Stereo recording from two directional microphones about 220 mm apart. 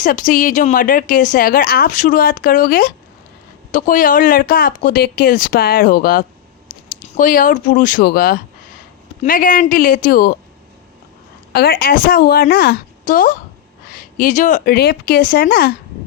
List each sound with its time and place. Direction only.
0.0 s speech: 40° left (ahead or behind)
11.5 s speech: 45° left (ahead or behind)